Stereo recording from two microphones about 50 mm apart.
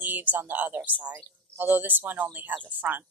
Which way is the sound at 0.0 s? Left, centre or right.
Right.